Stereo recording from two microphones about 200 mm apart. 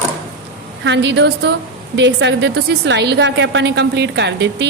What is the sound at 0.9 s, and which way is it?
A woman's voice, 60° right (ahead or behind).